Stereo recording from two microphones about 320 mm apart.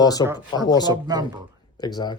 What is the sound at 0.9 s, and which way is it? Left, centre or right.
Speech, centre.